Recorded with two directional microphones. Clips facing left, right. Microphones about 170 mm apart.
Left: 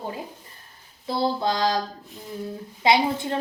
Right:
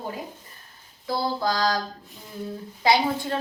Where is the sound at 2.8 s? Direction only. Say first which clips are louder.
Left 1 dB; 20° left (ahead or behind).